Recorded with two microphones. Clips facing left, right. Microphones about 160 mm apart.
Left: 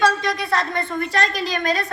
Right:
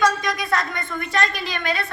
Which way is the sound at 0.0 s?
30° left (ahead or behind).